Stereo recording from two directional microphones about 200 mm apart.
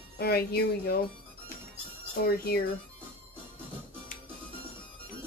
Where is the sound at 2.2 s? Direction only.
50° left (ahead or behind).